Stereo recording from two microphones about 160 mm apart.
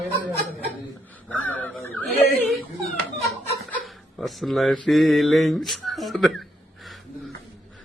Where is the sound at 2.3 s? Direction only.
70° right (ahead or behind).